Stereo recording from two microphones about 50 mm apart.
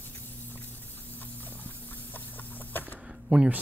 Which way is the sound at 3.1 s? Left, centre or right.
Right.